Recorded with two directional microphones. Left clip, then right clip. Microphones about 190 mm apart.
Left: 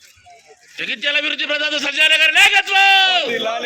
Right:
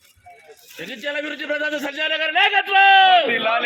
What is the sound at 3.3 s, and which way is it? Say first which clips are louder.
Speech: right 2 dB; 30° left (ahead or behind).